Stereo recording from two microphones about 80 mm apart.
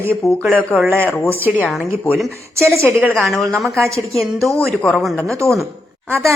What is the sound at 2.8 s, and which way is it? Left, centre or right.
Speech, right.